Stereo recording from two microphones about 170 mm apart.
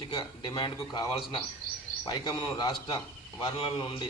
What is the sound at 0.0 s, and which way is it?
Speech, 25° left (ahead or behind).